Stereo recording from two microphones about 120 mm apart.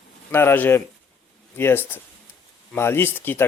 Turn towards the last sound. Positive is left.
turn(degrees=15)  # may be behind; listen again after turning